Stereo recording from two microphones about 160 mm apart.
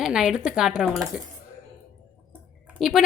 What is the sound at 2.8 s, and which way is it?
Speech, centre (ahead or behind).